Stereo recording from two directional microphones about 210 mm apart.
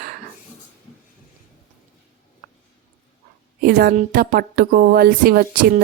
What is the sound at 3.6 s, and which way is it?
Speech, 40° right (ahead or behind).